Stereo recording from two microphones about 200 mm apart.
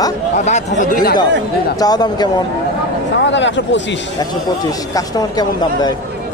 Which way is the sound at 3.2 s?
65° left (ahead or behind).